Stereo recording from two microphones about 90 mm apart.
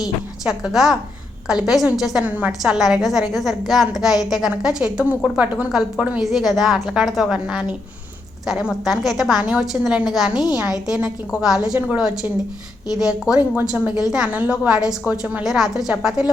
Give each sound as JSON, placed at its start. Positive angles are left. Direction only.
{"t": 0.4, "sound": "a woman's voice", "side_deg": -5}
{"t": 2.2, "sound": "a woman's voice", "side_deg": -15}
{"t": 2.5, "sound": "a woman's voice", "side_deg": -5}
{"t": 11.8, "sound": "a woman's voice", "side_deg": -15}
{"t": 12.0, "sound": "a woman's voice", "side_deg": -5}